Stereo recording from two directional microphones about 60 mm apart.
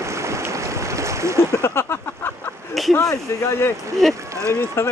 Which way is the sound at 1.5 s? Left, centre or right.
Left.